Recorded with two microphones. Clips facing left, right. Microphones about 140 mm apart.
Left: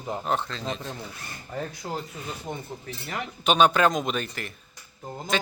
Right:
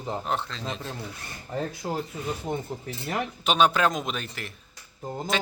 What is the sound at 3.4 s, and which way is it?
Speech, centre (ahead or behind).